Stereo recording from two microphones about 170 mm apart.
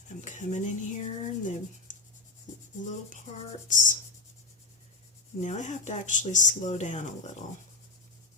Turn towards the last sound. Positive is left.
turn(degrees=45)  # may be behind; listen again after turning